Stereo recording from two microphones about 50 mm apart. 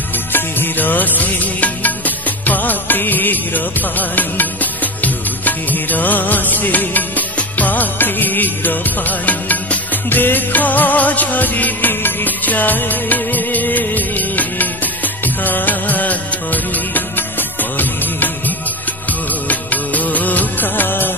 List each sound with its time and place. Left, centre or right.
0.3 s music: left
10.0 s music: left
19.4 s music of bollywood: left